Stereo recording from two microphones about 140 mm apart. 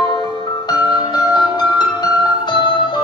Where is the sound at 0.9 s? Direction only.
30° left (ahead or behind).